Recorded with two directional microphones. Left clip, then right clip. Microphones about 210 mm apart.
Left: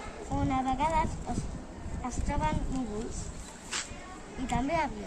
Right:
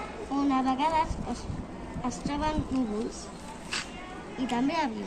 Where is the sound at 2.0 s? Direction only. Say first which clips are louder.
Right 2 dB; 15° left (ahead or behind).